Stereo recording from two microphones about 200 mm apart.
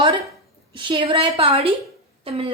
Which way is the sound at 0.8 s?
25° right (ahead or behind).